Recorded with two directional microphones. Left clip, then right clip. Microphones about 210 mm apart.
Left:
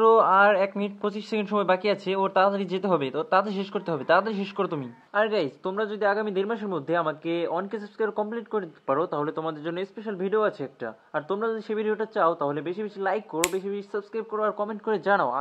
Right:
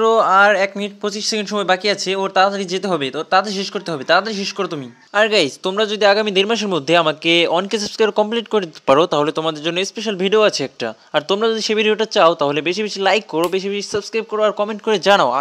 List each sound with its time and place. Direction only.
0.0 s speech: 25° right (ahead or behind)
5.1 s speech: 40° right (ahead or behind)